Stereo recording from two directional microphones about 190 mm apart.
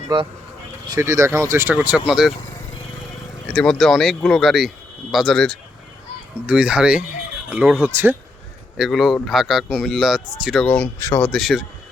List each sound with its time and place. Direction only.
0.1 s speech: 25° right (ahead or behind); by 2.3 s 5° right (ahead or behind)
3.5 s speech: 5° left (ahead or behind); by 8.1 s 10° right (ahead or behind)
8.8 s speech: centre (ahead or behind)